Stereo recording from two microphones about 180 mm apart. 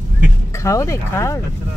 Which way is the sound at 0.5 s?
15° left (ahead or behind).